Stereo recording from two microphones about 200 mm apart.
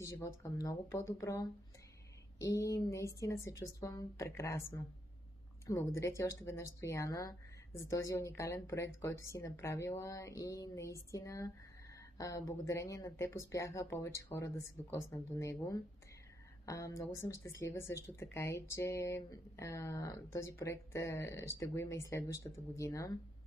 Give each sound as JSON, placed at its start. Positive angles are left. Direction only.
{"t": 0.0, "sound": "speech", "side_deg": 15}